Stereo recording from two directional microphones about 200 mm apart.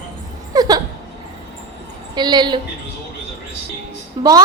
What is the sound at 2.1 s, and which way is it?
Speech, 20° right (ahead or behind).